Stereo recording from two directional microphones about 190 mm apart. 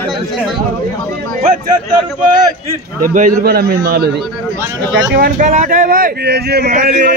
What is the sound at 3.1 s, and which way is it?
A man's voice, 45° right (ahead or behind).